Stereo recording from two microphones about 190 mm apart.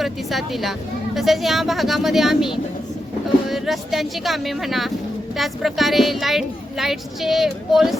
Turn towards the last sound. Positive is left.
turn(degrees=0)  # may be behind; listen again after turning